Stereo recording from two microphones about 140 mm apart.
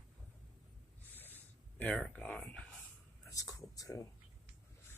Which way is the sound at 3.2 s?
25° left (ahead or behind).